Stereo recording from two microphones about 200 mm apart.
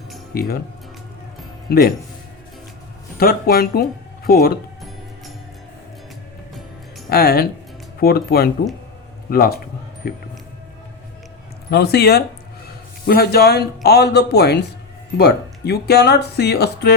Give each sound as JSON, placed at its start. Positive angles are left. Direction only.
{"t": 0.3, "sound": "speech", "side_deg": 50}
{"t": 1.7, "sound": "speech", "side_deg": 50}
{"t": 3.2, "sound": "speech", "side_deg": 50}
{"t": 7.1, "sound": "speech", "side_deg": 50}
{"t": 11.7, "sound": "speech", "side_deg": 55}